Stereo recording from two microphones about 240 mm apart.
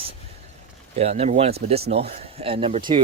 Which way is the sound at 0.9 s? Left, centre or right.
Right.